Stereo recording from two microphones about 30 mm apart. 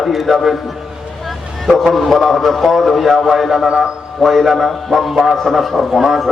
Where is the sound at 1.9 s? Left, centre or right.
Centre.